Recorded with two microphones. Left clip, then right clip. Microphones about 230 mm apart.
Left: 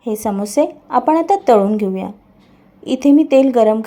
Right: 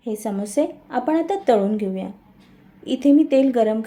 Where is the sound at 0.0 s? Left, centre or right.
Centre.